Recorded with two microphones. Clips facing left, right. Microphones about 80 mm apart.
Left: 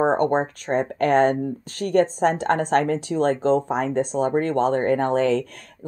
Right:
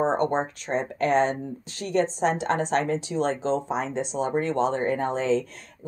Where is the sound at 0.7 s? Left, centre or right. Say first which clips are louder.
Left 4 dB; left.